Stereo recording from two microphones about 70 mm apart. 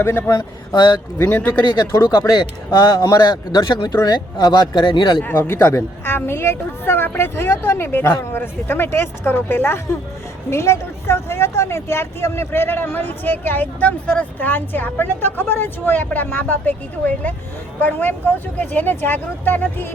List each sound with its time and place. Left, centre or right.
0.0 s a woman's voice: left
0.7 s speech: left
1.2 s speech: left
1.6 s speech: left
5.2 s a woman's voice: left